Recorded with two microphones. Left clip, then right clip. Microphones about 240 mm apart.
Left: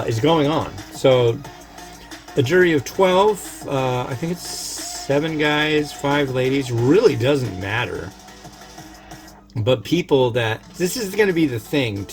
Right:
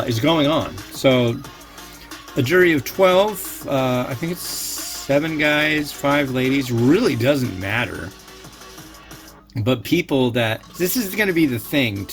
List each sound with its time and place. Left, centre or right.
0.1 s speech: right
2.3 s speech: right
9.6 s speech: right